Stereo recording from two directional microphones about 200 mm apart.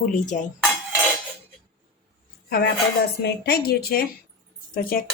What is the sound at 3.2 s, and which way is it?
Speech, 50° left (ahead or behind).